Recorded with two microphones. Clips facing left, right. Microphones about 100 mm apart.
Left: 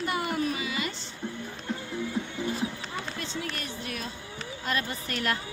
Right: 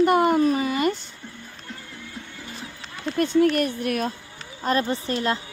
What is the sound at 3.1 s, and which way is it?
Speech, 55° right (ahead or behind).